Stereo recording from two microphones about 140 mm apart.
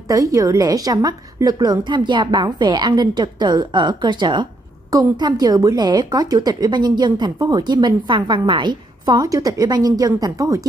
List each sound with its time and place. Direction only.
0.1 s a woman's voice: 25° right (ahead or behind)